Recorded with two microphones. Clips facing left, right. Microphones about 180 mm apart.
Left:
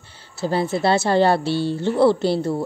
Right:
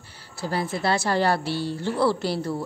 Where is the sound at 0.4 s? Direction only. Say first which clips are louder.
Left 6 dB; 25° left (ahead or behind).